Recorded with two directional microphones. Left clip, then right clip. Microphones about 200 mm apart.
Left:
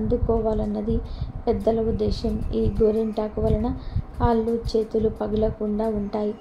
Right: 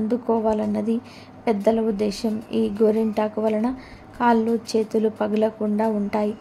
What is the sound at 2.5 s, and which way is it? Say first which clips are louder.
Speech: right 1 dB; 75° right (ahead or behind).